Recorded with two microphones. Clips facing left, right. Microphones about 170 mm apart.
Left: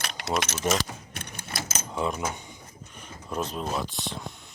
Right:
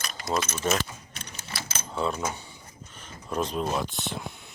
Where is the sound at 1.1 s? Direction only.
55° left (ahead or behind).